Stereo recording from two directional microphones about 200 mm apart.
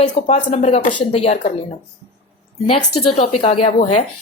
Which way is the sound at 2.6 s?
25° left (ahead or behind).